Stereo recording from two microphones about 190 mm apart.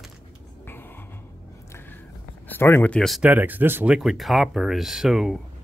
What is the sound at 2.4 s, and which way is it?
Speech, 10° left (ahead or behind).